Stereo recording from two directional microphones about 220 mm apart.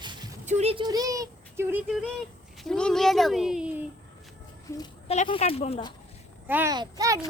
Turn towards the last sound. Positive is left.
turn(degrees=-15)  # may be behind; listen again after turning